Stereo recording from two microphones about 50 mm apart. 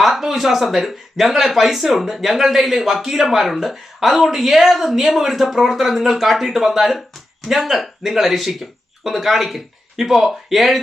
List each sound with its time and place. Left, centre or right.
0.0 s speech: centre